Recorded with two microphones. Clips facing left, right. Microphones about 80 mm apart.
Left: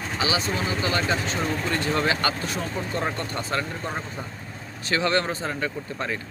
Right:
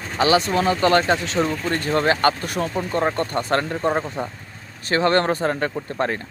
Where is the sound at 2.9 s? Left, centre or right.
Right.